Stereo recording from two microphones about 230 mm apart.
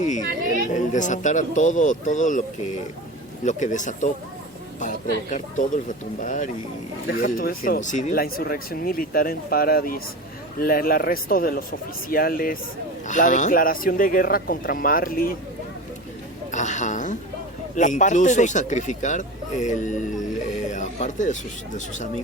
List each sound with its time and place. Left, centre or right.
0.7 s speech: left
3.4 s speech: left
16.5 s a man's voice: left